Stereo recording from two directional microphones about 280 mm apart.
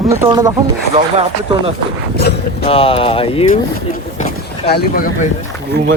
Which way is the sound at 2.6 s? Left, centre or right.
Centre.